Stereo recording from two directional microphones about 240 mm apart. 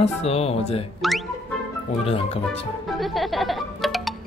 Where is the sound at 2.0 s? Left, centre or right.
Left.